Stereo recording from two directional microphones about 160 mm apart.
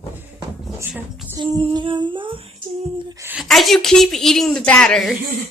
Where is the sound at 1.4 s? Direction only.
30° right (ahead or behind).